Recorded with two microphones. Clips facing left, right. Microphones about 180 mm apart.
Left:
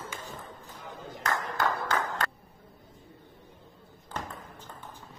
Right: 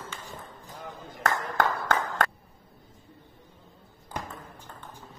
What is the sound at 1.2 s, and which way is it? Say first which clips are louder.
Clapping: right 3 dB; 55° right (ahead or behind).